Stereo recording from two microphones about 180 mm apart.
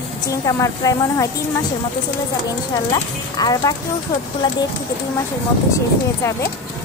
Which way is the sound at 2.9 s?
20° left (ahead or behind).